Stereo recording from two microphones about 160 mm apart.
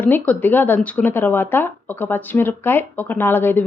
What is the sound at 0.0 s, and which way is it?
Speech, 10° left (ahead or behind).